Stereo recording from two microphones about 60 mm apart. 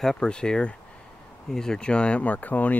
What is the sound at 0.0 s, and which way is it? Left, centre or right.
Speech, centre.